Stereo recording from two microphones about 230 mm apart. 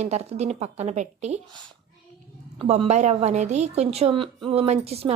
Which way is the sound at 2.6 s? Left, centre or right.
Right.